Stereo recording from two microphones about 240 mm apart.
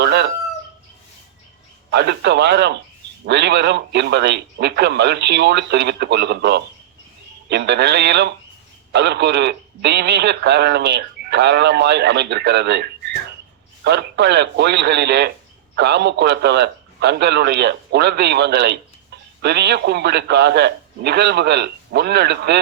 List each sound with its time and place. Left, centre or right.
0.0 s chicken: right
1.9 s speech: right